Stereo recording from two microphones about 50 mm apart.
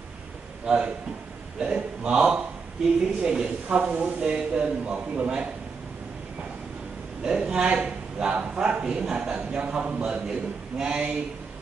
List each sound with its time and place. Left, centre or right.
0.7 s speech: right
2.1 s a woman's voice: centre
3.6 s speech: right
7.2 s speech: centre